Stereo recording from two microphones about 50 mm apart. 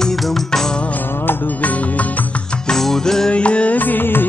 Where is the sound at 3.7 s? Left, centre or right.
Left.